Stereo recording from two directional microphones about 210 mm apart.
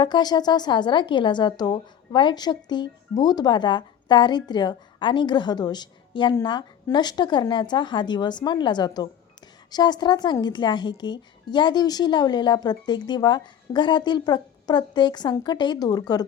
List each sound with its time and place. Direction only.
0.0 s a woman's voice: 20° left (ahead or behind)